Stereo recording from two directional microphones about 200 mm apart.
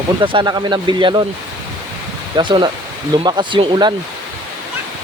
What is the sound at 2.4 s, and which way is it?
Speech, 25° right (ahead or behind).